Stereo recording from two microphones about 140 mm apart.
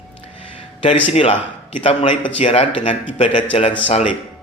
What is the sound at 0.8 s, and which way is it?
Speech, 45° left (ahead or behind).